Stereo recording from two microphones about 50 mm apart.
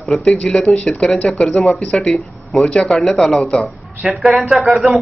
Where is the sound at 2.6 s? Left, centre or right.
Centre.